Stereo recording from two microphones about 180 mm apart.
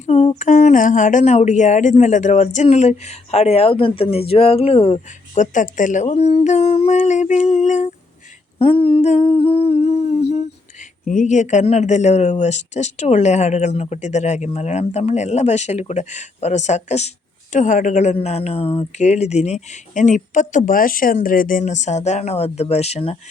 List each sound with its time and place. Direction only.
0.0 s speech: 35° left (ahead or behind)
8.5 s humming: 30° left (ahead or behind)
11.0 s speech: 45° left (ahead or behind)